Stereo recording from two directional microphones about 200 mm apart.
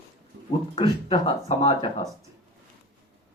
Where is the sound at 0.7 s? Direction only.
25° left (ahead or behind).